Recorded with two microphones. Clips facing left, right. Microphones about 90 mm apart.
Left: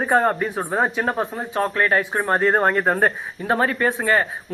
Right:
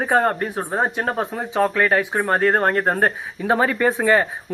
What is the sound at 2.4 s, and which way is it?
Speech, 65° right (ahead or behind).